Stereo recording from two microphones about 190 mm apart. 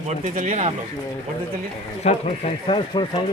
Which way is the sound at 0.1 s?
40° right (ahead or behind).